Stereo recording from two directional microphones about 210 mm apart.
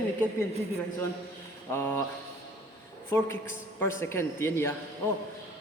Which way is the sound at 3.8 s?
10° left (ahead or behind).